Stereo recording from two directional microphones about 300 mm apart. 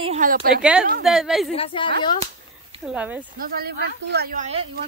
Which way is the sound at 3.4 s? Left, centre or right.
Right.